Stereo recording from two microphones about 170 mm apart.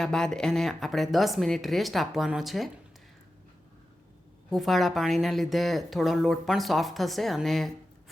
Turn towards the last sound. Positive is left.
turn(degrees=0)  # may be behind; listen again after turning